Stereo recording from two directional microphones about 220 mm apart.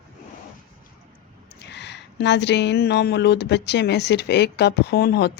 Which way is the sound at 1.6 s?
50° left (ahead or behind).